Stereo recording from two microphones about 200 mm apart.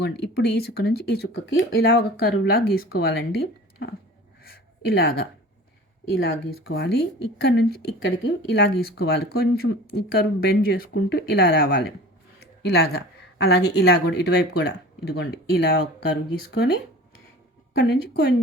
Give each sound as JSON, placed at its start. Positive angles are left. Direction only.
{"t": 0.0, "sound": "speech", "side_deg": 55}
{"t": 4.4, "sound": "a sound", "side_deg": 50}
{"t": 6.1, "sound": "speech", "side_deg": 55}